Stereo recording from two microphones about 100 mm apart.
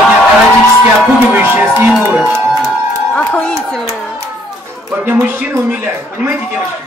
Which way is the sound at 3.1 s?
10° left (ahead or behind).